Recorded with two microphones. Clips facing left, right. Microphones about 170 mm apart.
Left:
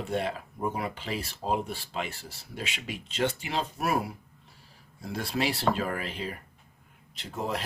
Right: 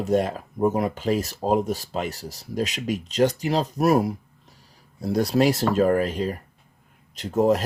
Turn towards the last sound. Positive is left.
turn(degrees=-45)  # may be behind; listen again after turning